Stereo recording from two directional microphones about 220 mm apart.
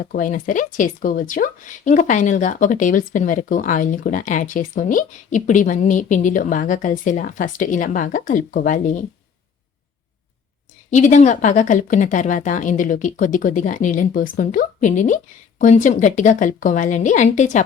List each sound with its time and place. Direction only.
0.0 s speech: 40° left (ahead or behind)
10.9 s speech: 35° left (ahead or behind)